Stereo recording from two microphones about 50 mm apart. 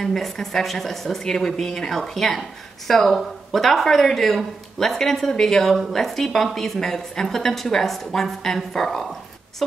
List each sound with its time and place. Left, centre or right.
0.0 s speech: centre